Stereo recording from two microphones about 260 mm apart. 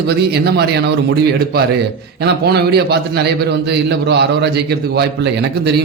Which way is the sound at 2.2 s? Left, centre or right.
Right.